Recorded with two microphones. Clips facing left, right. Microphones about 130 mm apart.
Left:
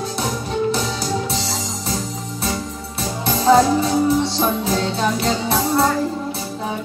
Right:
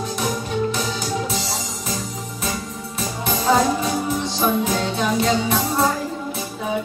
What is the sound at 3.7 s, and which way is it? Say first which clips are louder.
Music: left 6 dB; 35° left (ahead or behind).